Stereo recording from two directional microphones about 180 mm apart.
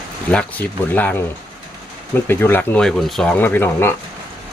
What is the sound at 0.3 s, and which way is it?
Speech, 10° left (ahead or behind).